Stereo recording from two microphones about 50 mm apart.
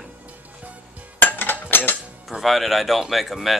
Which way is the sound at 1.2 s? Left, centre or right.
Left.